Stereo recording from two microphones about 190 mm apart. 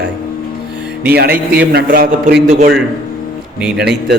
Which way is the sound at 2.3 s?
60° right (ahead or behind).